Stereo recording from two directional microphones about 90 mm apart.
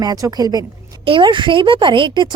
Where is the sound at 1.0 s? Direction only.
70° right (ahead or behind).